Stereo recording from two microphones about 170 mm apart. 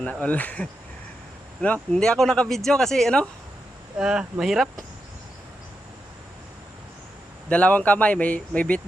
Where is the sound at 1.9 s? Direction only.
5° left (ahead or behind).